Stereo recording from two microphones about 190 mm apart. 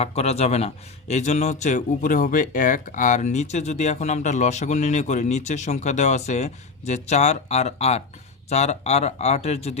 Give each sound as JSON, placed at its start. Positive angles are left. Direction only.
{"t": 0.0, "sound": "speech", "side_deg": 35}